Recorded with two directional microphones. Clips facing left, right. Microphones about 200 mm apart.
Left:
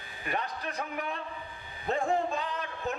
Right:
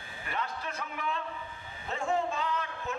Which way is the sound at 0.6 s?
35° left (ahead or behind).